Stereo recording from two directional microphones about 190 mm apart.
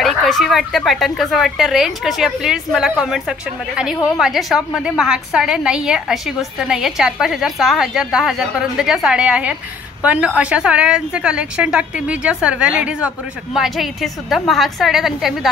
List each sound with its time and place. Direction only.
0.0 s speech: centre (ahead or behind)